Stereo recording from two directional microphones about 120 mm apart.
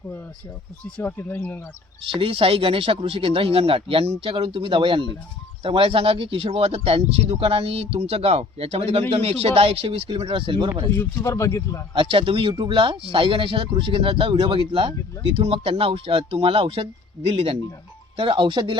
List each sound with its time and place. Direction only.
0.9 s speech: 10° left (ahead or behind)
2.0 s speech: 50° right (ahead or behind)
10.9 s speech: 20° left (ahead or behind)
11.9 s speech: 50° right (ahead or behind)